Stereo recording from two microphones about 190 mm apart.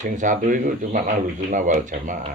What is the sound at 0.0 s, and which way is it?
Speech, 40° right (ahead or behind).